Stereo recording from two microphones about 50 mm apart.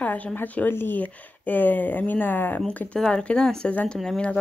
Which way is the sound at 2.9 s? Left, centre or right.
Centre.